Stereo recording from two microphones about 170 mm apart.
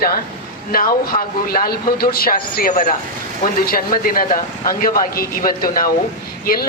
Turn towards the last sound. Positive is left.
turn(degrees=60)  # may be behind; listen again after turning